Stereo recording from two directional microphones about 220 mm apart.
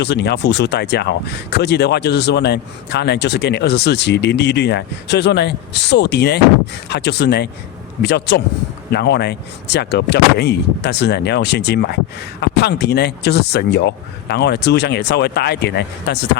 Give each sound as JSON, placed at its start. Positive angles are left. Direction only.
{"t": 0.0, "sound": "speech", "side_deg": 50}